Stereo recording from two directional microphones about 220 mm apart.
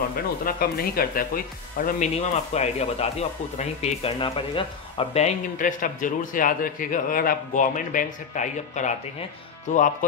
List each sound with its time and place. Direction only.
0.5 s speech: 40° left (ahead or behind)